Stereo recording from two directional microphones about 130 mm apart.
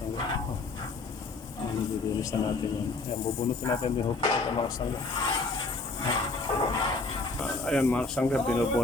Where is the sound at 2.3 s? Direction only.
35° left (ahead or behind).